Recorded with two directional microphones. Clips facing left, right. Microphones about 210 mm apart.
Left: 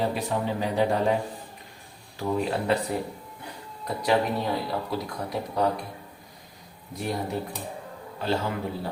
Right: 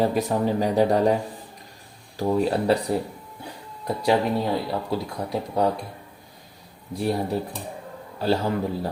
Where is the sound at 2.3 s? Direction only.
35° right (ahead or behind).